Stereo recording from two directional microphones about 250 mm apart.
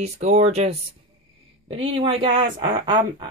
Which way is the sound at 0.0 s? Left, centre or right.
Right.